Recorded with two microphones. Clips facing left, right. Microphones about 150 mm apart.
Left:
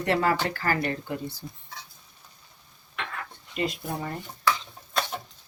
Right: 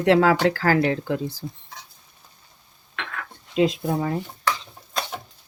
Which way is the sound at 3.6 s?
90° right.